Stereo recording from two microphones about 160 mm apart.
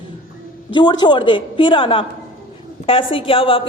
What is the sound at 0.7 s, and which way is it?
A woman's voice, 30° left (ahead or behind).